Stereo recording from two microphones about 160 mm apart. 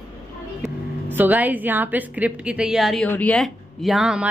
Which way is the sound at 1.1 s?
10° right (ahead or behind).